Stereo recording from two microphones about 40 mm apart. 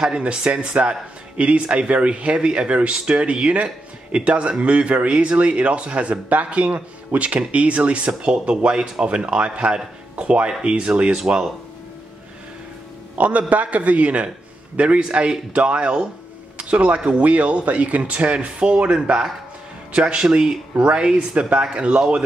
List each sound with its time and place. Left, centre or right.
0.0 s speech: right
11.3 s speech: right
13.2 s speech: right; by 21.4 s centre
21.4 s speech: right